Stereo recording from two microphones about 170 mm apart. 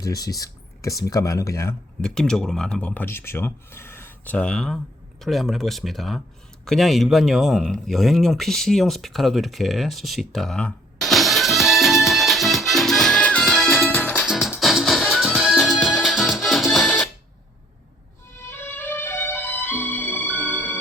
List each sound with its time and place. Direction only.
0.0 s speech: 20° left (ahead or behind)
2.0 s speech: 5° left (ahead or behind)
6.7 s a sound: centre (ahead or behind)
14.2 s music: 5° right (ahead or behind)
18.3 s music: 15° left (ahead or behind)